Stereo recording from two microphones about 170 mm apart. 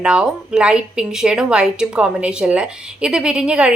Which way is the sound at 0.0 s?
5° right (ahead or behind).